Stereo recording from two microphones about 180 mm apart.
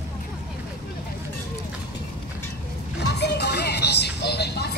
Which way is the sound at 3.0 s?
65° left (ahead or behind).